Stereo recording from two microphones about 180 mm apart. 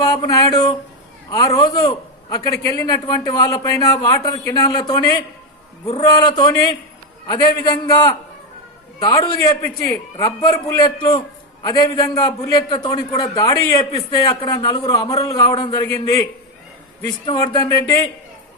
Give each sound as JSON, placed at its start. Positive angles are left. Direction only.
{"t": 0.0, "sound": "a man's voice", "side_deg": 20}